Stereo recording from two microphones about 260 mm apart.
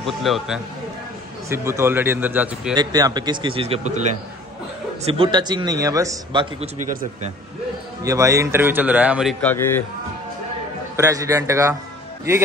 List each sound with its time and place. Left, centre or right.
0.0 s a man's voice: centre
6.6 s speech: right
8.0 s a man's voice: centre
11.0 s a man's voice: centre